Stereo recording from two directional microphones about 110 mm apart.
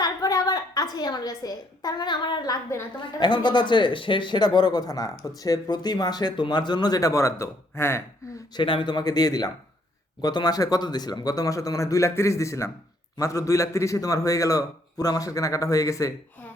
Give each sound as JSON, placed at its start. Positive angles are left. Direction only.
{"t": 0.0, "sound": "a woman's voice", "side_deg": 35}
{"t": 3.0, "sound": "a man's voice", "side_deg": 45}
{"t": 8.5, "sound": "a man's voice", "side_deg": 50}